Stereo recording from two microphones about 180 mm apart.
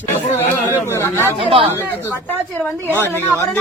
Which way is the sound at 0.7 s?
15° left (ahead or behind).